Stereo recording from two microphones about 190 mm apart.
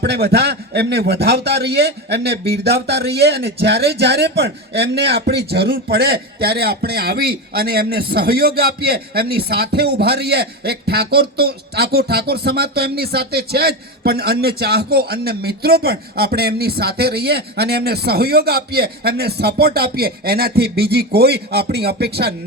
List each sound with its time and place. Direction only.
0.0 s a man's voice: 60° right (ahead or behind)